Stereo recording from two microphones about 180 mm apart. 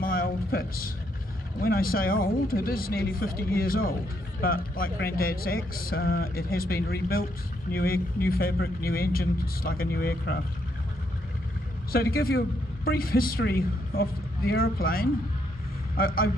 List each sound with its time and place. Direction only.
0.0 s a sound: 55° left (ahead or behind)
1.6 s speech: 55° left (ahead or behind)
11.9 s speech: 55° left (ahead or behind)